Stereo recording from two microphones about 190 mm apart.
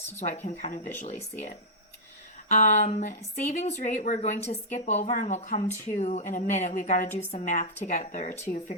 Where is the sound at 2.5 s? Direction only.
40° left (ahead or behind).